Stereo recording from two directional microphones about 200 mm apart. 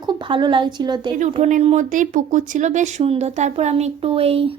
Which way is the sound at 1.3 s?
35° right (ahead or behind).